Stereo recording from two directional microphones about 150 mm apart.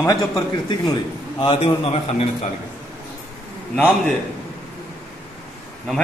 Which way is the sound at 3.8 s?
10° left (ahead or behind).